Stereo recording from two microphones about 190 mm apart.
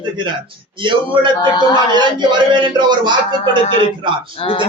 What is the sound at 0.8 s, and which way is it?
A man's voice, 25° right (ahead or behind).